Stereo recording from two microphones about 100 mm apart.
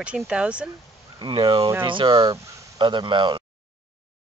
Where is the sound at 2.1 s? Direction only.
40° right (ahead or behind).